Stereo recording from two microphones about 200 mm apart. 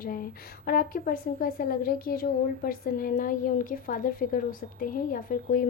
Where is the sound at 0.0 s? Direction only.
45° left (ahead or behind).